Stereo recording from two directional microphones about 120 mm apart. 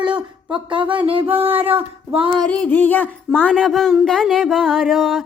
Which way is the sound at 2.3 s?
10° left (ahead or behind).